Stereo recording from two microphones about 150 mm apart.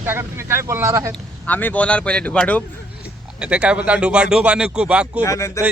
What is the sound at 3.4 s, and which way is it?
Speech, 10° right (ahead or behind).